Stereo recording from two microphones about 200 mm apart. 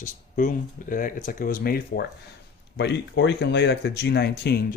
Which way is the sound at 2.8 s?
60° left (ahead or behind).